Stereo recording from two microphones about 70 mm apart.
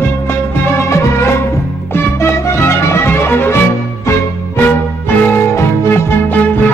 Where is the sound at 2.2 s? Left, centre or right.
Left.